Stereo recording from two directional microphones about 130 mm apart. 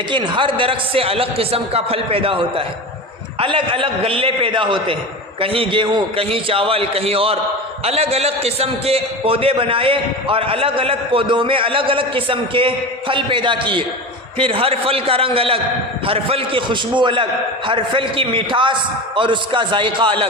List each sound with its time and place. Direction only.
0.1 s a man's voice: 40° right (ahead or behind)